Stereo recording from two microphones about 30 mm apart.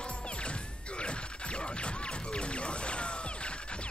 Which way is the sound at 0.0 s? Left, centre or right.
Left.